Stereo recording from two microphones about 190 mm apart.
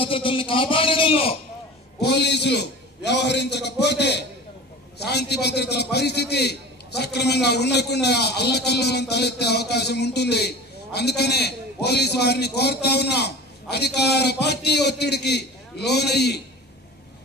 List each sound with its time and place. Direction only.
0.0 s a man's voice: 25° left (ahead or behind)
2.0 s a man's voice: 60° left (ahead or behind)